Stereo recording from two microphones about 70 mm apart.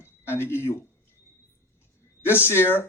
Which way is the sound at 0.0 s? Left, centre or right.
Left.